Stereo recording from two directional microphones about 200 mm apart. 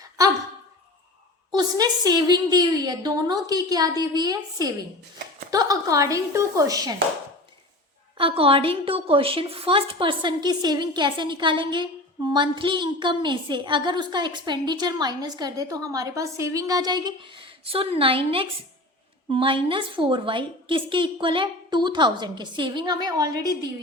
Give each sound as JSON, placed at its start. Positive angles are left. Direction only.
{"t": 1.5, "sound": "a woman's voice", "side_deg": -20}
{"t": 8.2, "sound": "a woman's voice", "side_deg": -30}